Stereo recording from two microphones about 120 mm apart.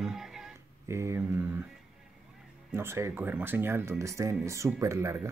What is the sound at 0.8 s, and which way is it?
Speech, 25° right (ahead or behind).